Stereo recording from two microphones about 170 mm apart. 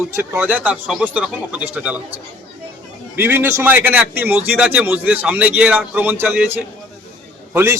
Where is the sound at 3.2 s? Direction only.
10° right (ahead or behind).